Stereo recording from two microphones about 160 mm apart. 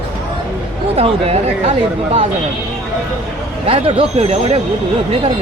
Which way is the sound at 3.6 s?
35° right (ahead or behind).